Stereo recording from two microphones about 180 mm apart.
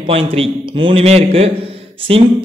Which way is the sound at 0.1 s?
30° right (ahead or behind).